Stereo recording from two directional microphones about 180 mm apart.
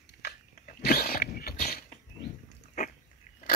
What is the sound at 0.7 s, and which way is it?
Dog, 60° left (ahead or behind).